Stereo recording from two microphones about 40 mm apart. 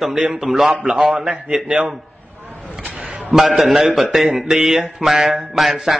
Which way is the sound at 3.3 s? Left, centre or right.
Centre.